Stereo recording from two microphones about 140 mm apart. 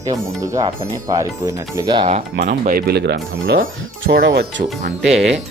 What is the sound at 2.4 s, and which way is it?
Speech, 80° right.